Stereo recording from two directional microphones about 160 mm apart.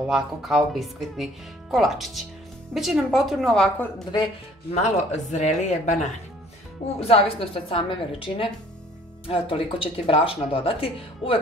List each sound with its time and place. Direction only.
0.1 s speech: centre (ahead or behind)
4.7 s speech: 45° left (ahead or behind)
7.0 s speech: 40° left (ahead or behind)